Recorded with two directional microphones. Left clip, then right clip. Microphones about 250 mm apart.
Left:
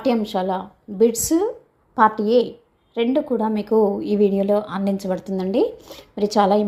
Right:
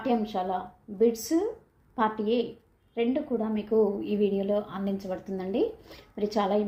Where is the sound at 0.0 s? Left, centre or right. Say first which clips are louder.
Left 7 dB; left.